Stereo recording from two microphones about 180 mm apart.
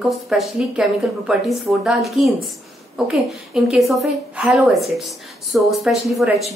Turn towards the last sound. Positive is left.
turn(degrees=0)  # may be behind; listen again after turning